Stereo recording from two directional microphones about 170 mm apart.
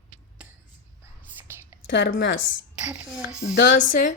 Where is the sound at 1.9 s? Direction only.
85° left.